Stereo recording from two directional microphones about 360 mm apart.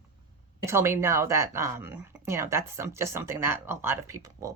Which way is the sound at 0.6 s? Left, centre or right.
Centre.